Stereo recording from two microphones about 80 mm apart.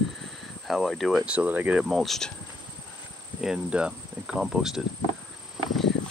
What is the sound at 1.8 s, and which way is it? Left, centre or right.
Speech, centre.